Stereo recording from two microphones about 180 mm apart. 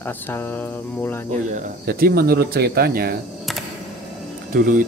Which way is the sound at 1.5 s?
55° right (ahead or behind).